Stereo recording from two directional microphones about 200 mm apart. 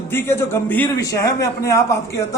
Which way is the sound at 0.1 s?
10° left (ahead or behind).